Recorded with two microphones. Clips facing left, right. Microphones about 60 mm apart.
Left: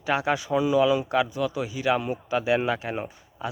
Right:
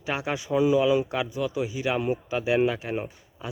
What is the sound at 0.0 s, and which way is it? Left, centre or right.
A man's voice, centre.